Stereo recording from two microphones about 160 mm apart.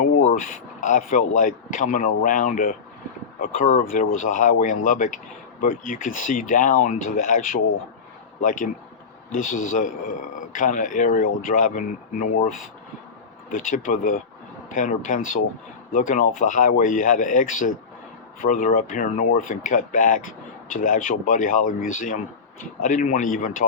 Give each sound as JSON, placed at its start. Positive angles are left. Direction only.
{"t": 0.0, "sound": "a man's voice", "side_deg": 55}
{"t": 13.5, "sound": "speech", "side_deg": 55}